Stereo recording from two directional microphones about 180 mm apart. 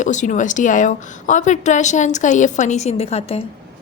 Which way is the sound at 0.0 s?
45° left (ahead or behind).